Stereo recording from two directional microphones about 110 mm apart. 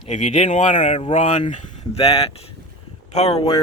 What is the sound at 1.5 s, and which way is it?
Speech, 80° left.